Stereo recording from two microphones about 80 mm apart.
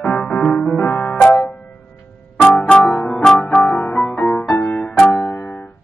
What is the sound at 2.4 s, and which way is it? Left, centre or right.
Keyboard, centre.